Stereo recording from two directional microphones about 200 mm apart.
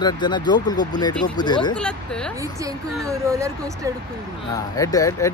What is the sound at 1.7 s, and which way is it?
Speech, 5° left (ahead or behind).